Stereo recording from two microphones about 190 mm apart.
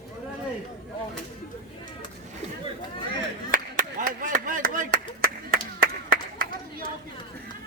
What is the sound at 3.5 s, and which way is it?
Clapping, 45° right (ahead or behind).